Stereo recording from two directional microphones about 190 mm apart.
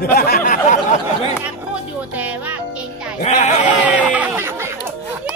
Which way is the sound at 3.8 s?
5° right (ahead or behind).